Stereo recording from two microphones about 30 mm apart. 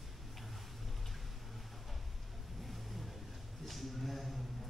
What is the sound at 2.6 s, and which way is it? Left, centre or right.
Vehicle, centre.